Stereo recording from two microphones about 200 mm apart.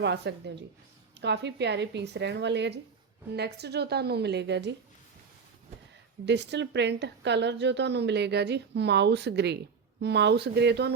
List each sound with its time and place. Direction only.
0.0 s a woman's voice: 60° right (ahead or behind)
6.2 s a woman's voice: 60° right (ahead or behind)